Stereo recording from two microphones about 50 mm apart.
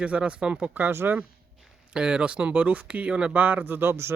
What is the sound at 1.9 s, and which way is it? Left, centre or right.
Speech, centre.